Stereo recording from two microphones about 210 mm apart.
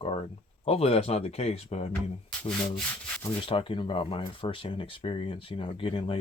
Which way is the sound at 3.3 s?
25° left (ahead or behind).